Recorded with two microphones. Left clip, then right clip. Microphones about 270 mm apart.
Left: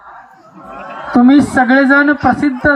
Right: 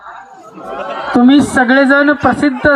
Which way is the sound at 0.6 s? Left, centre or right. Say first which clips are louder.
Right 6 dB; right.